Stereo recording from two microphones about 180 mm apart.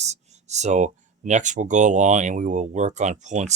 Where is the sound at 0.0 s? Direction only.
40° right (ahead or behind).